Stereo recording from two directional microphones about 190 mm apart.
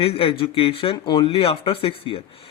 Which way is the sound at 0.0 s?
30° left (ahead or behind).